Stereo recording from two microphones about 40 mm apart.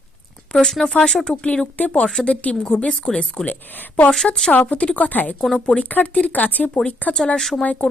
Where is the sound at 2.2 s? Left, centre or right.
Left.